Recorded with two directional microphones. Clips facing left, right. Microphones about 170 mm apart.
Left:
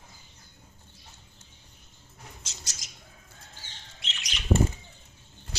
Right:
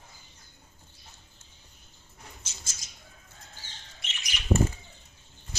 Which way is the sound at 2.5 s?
85° left.